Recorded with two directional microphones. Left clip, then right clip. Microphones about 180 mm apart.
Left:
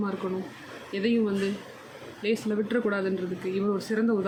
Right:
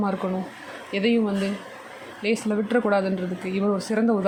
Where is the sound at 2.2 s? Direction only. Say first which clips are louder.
Right 3 dB; 35° right (ahead or behind).